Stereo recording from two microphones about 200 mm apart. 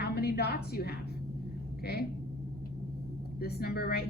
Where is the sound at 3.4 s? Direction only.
50° left (ahead or behind).